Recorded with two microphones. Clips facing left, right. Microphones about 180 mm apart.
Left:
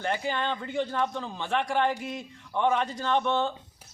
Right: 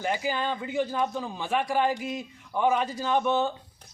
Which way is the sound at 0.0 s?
5° right (ahead or behind).